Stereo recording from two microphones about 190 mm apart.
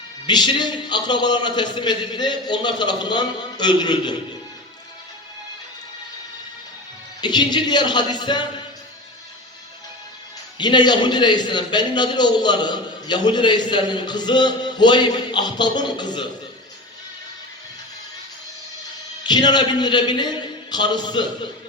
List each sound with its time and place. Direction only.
0.3 s a man's voice: 20° left (ahead or behind)
7.2 s a man's voice: 25° left (ahead or behind)
10.6 s a man's voice: 25° left (ahead or behind)
19.2 s a man's voice: 25° left (ahead or behind)